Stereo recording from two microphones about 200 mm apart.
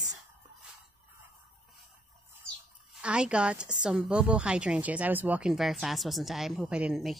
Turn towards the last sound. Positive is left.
turn(degrees=-5)  # may be behind; listen again after turning